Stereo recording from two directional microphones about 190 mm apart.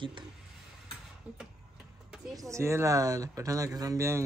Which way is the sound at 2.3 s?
15° right (ahead or behind).